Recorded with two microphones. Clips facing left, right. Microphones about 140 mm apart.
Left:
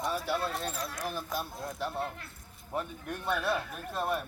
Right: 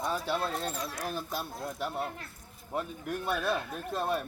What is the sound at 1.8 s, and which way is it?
Speech, 20° right (ahead or behind).